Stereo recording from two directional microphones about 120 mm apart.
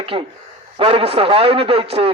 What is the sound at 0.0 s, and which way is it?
A man's voice, 50° right (ahead or behind).